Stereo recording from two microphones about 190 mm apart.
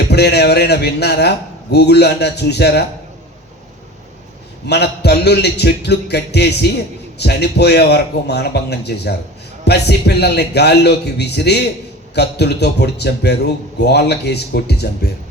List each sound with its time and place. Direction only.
0.1 s a man's voice: 60° left (ahead or behind)
4.6 s a man's voice: 60° left (ahead or behind)